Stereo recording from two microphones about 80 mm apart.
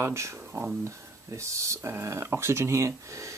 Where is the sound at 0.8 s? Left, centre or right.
Right.